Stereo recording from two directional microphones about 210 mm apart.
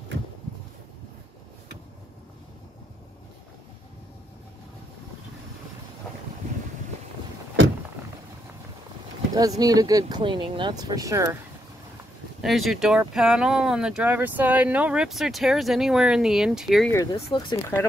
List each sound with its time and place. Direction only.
9.3 s speech: 15° right (ahead or behind)
12.4 s speech: centre (ahead or behind)
16.9 s speech: 20° left (ahead or behind)